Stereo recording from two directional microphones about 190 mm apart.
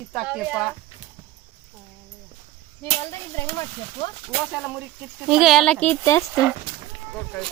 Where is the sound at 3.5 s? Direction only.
20° left (ahead or behind).